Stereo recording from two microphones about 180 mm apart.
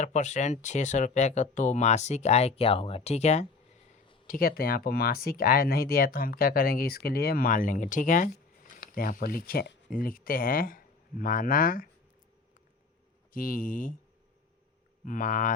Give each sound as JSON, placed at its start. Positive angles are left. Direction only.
{"t": 0.0, "sound": "speech", "side_deg": 40}
{"t": 4.3, "sound": "speech", "side_deg": 55}
{"t": 13.3, "sound": "speech", "side_deg": 50}
{"t": 15.0, "sound": "speech", "side_deg": 50}